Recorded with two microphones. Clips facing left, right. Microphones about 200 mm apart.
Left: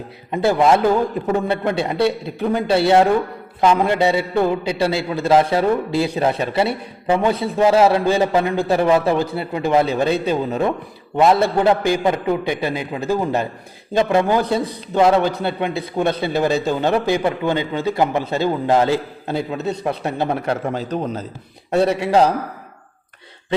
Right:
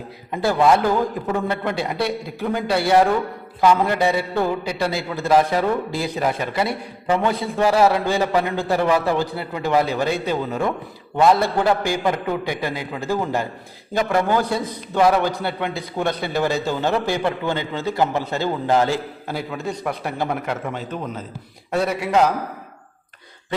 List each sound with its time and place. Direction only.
0.3 s a man's voice: 20° left (ahead or behind)